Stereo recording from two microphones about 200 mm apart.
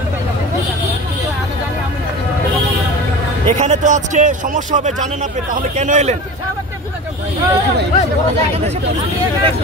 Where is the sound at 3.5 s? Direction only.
35° right (ahead or behind).